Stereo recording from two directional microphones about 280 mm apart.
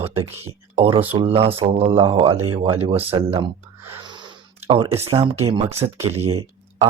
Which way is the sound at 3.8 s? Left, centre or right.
Centre.